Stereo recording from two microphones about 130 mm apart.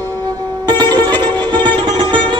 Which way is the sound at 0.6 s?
35° right (ahead or behind).